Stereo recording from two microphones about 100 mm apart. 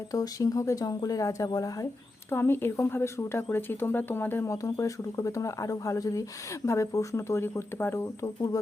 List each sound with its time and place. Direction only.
0.1 s speech: 35° left (ahead or behind)
2.3 s speech: 25° left (ahead or behind)
4.5 s speech: 35° left (ahead or behind)